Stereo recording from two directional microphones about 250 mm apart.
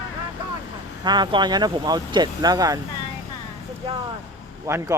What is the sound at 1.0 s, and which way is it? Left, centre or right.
Speech, centre.